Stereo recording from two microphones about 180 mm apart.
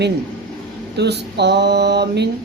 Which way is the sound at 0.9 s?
70° right (ahead or behind).